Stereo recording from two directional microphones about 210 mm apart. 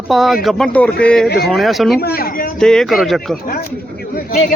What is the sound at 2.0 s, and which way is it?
Speech, 45° left (ahead or behind).